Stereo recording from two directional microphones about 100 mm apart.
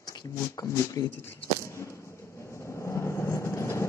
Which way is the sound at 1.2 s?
20° left (ahead or behind).